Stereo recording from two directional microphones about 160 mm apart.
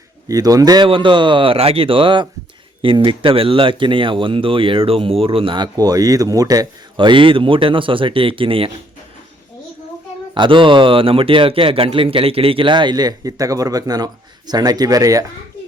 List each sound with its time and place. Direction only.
0.3 s speech: 20° right (ahead or behind)
10.3 s speech: 30° right (ahead or behind)